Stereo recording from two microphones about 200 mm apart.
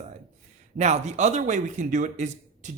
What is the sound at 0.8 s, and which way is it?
A man's voice, 35° right (ahead or behind).